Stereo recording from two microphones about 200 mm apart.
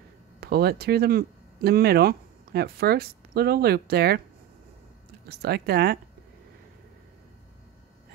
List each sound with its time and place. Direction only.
0.4 s speech: 50° right (ahead or behind)
5.3 s speech: 50° right (ahead or behind)